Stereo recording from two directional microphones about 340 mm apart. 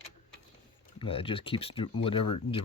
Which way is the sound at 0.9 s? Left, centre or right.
Centre.